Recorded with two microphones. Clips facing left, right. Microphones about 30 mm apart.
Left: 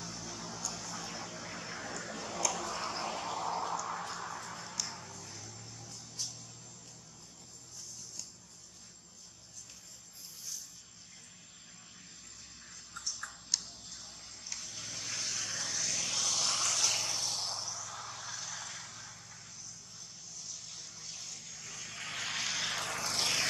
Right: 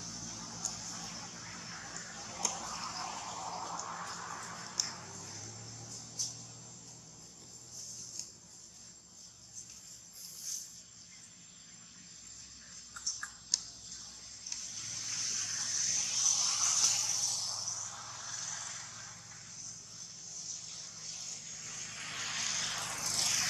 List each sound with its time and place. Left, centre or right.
0.0 s vehicle: left
2.5 s a sound: left; by 6.5 s centre
13.2 s tick-tock: centre
14.6 s vehicle: left
20.3 s vehicle: centre; by 23.4 s left